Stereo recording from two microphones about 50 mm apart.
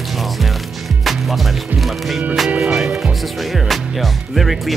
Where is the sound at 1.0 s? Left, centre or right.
Centre.